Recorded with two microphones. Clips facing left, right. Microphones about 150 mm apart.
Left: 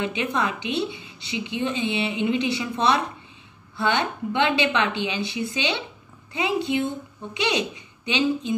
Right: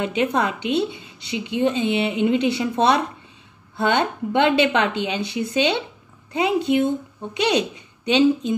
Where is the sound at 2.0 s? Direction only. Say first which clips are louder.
Right 4 dB; 45° right (ahead or behind).